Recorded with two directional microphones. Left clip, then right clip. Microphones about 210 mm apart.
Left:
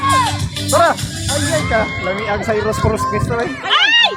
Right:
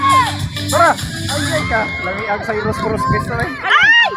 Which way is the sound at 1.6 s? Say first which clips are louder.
Left 1 dB; 50° left (ahead or behind).